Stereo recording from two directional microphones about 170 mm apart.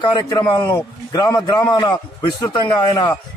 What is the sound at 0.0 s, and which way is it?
A man's voice, 25° left (ahead or behind).